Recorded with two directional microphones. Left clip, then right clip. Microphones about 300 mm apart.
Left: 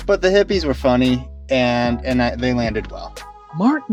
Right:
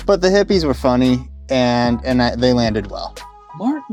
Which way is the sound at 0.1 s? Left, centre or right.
Right.